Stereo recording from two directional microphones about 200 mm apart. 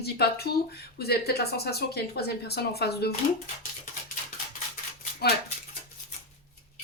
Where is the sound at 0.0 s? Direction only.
55° left (ahead or behind).